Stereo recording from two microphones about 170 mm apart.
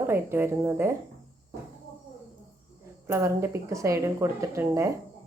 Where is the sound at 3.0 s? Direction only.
15° right (ahead or behind).